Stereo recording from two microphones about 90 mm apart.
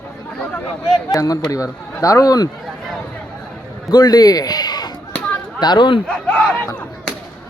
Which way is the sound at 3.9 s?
50° left (ahead or behind).